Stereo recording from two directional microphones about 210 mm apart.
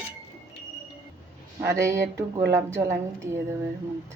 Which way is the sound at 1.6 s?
10° right (ahead or behind).